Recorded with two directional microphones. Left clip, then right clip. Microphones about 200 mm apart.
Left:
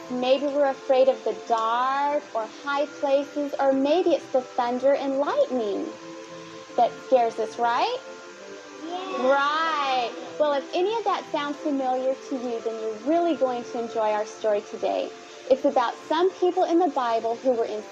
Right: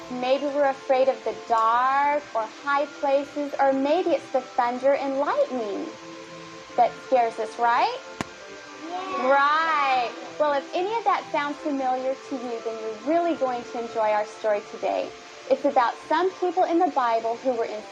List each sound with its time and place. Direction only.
0.2 s speech: 35° left (ahead or behind)
6.7 s speech: 30° left (ahead or behind)
9.0 s a child's voice: 30° left (ahead or behind)
13.1 s a woman's voice: 30° left (ahead or behind)